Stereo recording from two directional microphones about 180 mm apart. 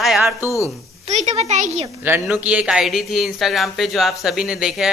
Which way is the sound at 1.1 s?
40° right (ahead or behind).